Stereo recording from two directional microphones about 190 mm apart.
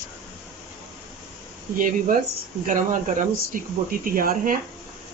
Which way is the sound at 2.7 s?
45° right (ahead or behind).